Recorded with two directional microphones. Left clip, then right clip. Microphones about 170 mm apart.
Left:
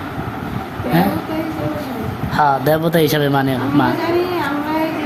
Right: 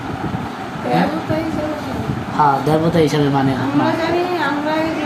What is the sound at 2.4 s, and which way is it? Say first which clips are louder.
Speech: even; 60° left (ahead or behind).